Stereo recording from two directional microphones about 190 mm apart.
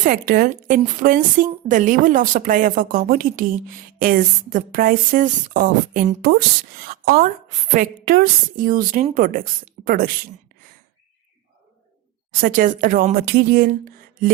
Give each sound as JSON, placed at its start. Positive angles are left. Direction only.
{"t": 0.0, "sound": "speech", "side_deg": -50}
{"t": 12.3, "sound": "speech", "side_deg": -45}